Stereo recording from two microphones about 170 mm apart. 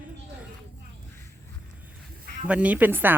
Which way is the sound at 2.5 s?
10° right (ahead or behind).